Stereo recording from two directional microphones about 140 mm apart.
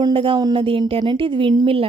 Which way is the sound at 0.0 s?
35° right (ahead or behind).